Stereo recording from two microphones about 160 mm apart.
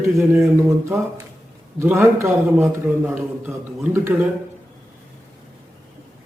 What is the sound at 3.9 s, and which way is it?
Speech, 15° right (ahead or behind).